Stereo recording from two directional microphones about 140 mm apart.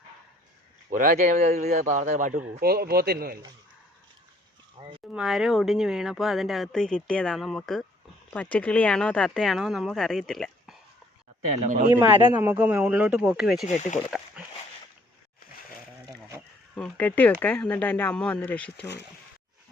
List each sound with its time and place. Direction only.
0.9 s a man's voice: 70° right (ahead or behind)
2.6 s speech: 90° right
4.8 s speech: 35° right (ahead or behind)
5.1 s speech: centre (ahead or behind)
12.2 s speech: 15° right (ahead or behind)
13.7 s speech: 55° left (ahead or behind)
16.7 s speech: 10° left (ahead or behind)